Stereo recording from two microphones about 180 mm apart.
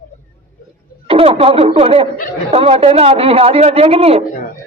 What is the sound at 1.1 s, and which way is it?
A woman's voice, 30° right (ahead or behind).